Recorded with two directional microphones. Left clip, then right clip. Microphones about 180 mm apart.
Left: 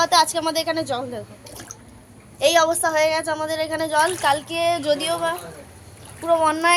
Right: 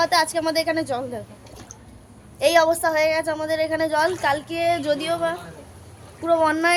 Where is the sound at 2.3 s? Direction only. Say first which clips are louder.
Even; 15° right (ahead or behind).